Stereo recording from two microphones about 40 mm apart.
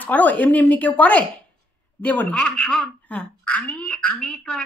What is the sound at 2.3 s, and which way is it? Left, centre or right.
Speech, left.